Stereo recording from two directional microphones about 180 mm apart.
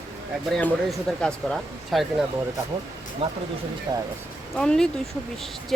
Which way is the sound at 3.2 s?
30° right (ahead or behind).